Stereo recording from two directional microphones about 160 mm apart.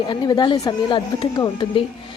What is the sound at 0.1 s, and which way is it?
A woman's voice, 25° left (ahead or behind).